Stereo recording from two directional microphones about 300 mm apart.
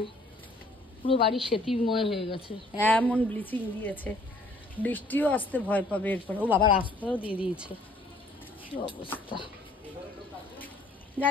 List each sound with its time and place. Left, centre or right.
1.0 s a woman's voice: centre
1.3 s speech: centre
2.2 s speech: centre
2.8 s speech: centre
6.6 s speech: centre
8.7 s speech: centre